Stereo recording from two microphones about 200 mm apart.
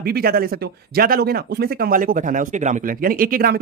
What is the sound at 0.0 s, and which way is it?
Speech, 50° right (ahead or behind).